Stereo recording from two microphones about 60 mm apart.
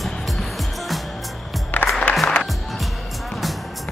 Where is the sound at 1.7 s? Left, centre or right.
Left.